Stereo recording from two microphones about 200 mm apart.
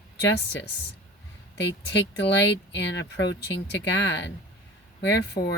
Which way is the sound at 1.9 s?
60° left (ahead or behind).